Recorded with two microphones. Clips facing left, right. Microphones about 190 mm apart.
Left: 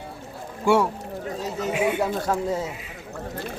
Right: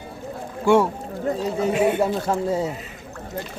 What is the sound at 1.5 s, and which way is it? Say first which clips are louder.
Speech: right 4 dB; 35° right (ahead or behind).